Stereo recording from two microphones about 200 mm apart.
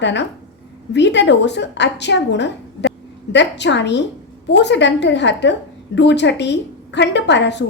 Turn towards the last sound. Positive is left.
turn(degrees=60)  # may be behind; listen again after turning